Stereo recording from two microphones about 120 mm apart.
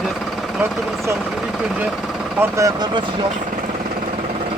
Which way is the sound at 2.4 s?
25° right (ahead or behind).